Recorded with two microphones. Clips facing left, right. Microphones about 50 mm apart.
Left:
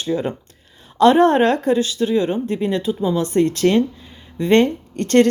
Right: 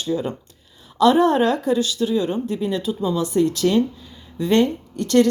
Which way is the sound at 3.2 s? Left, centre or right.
Left.